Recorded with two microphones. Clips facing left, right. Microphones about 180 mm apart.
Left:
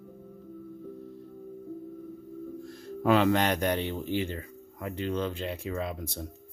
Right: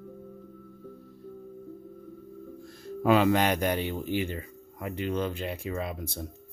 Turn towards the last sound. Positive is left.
turn(degrees=-5)  # may be behind; listen again after turning